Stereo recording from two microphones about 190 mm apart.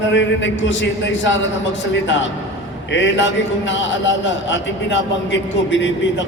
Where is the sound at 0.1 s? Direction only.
70° left (ahead or behind).